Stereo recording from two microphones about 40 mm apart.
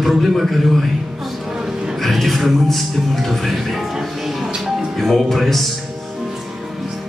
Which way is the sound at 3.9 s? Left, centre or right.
Centre.